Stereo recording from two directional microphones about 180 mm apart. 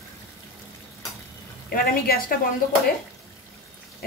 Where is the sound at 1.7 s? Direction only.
55° left (ahead or behind).